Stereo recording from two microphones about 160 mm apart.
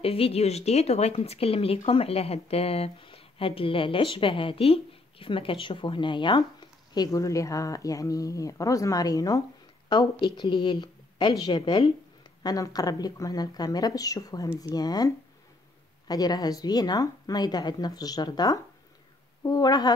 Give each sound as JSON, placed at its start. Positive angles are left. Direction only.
{"t": 0.0, "sound": "speech", "side_deg": 35}